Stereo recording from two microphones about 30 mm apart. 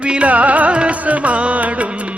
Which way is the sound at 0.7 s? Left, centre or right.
Right.